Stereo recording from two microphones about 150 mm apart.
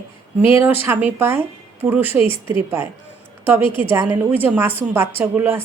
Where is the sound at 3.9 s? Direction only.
15° right (ahead or behind).